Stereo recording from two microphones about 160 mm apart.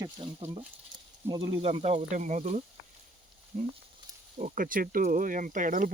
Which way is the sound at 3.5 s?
65° right (ahead or behind).